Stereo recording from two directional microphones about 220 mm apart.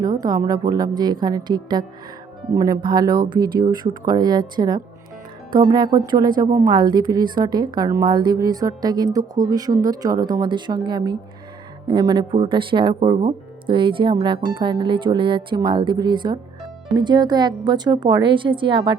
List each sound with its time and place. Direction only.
0.0 s a woman's voice: 15° right (ahead or behind)